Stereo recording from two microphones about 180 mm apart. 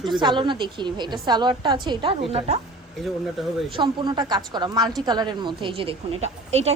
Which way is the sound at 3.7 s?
25° right (ahead or behind).